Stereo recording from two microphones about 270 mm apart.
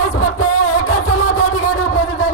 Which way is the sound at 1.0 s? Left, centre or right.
Left.